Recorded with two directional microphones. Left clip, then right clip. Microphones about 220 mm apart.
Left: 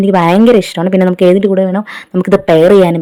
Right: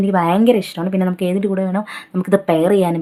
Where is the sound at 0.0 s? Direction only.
30° left (ahead or behind).